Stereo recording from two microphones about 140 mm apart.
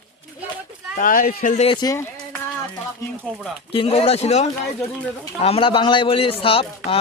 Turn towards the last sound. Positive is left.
turn(degrees=40)  # may be behind; listen again after turning